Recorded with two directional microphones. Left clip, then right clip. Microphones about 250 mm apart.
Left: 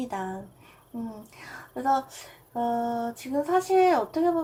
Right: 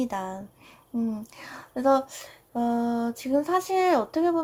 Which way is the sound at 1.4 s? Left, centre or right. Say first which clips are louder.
Right 3 dB; right.